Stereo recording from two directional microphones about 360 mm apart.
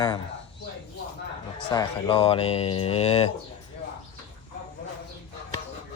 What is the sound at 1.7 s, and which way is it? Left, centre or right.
Speech, centre.